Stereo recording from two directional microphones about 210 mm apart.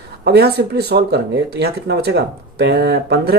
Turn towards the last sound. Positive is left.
turn(degrees=-50)  # may be behind; listen again after turning